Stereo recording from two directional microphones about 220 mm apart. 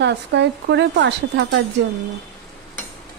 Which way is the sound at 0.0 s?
50° right (ahead or behind).